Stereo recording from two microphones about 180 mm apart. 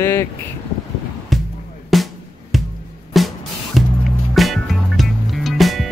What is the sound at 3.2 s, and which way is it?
Music, centre (ahead or behind).